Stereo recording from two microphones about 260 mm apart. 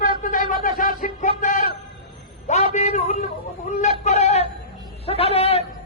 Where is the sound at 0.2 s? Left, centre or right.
Left.